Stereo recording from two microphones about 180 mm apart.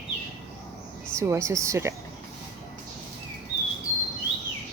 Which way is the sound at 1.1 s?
15° right (ahead or behind).